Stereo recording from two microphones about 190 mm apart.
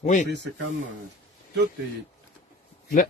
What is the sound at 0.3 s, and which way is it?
Speech, 65° right (ahead or behind).